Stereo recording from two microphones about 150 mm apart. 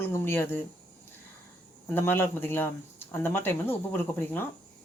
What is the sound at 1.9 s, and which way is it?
Speech, 15° left (ahead or behind).